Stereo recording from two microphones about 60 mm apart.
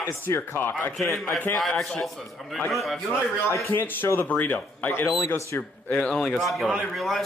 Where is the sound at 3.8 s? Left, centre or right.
Left.